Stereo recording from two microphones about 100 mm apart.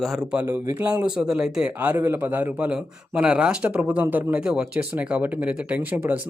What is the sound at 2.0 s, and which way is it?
A man's voice, 25° right (ahead or behind).